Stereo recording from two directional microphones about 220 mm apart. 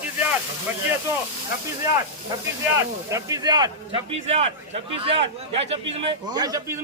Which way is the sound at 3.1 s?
15° right (ahead or behind).